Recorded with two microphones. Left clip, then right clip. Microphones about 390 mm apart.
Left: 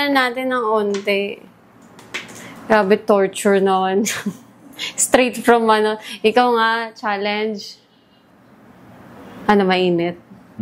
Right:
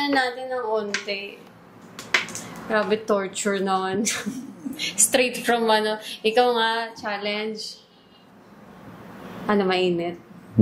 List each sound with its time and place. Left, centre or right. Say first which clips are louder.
0.0 s a woman's voice: left 6 dB; left
2.7 s a woman's voice: left 8 dB; left
9.5 s a woman's voice: left 6 dB; left